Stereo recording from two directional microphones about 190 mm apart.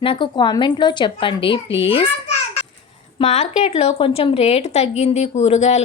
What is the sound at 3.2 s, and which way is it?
A woman's voice, 35° left (ahead or behind).